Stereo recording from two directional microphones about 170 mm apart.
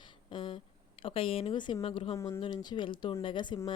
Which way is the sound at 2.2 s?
15° left (ahead or behind).